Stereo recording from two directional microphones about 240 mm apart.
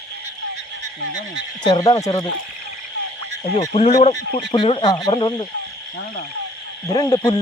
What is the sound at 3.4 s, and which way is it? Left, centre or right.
Speech, left.